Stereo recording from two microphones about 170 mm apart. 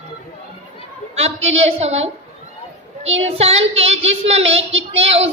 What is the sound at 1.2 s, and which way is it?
Child singing, 35° right (ahead or behind).